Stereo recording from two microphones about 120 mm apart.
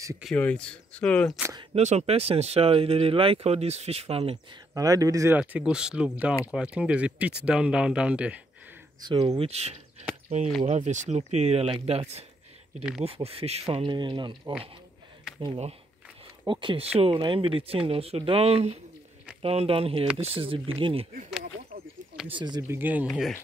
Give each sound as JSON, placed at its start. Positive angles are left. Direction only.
{"t": 0.4, "sound": "speech", "side_deg": 10}
{"t": 1.8, "sound": "speech", "side_deg": -70}
{"t": 4.7, "sound": "speech", "side_deg": -30}
{"t": 5.3, "sound": "speech", "side_deg": -10}
{"t": 9.0, "sound": "speech", "side_deg": -35}
{"t": 10.6, "sound": "speech", "side_deg": -80}
{"t": 13.8, "sound": "speech", "side_deg": -40}
{"t": 16.4, "sound": "speech", "side_deg": -45}
{"t": 22.3, "sound": "speech", "side_deg": -35}
{"t": 22.6, "sound": "speech", "side_deg": -20}